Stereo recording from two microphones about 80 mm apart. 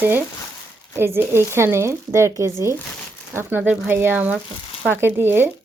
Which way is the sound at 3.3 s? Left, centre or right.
Right.